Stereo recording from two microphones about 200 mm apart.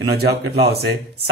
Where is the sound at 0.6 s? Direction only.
55° right (ahead or behind).